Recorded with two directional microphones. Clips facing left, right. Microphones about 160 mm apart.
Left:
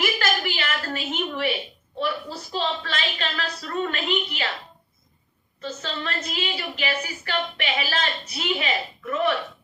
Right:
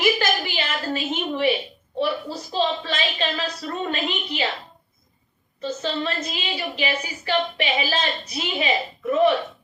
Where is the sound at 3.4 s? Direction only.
20° right (ahead or behind).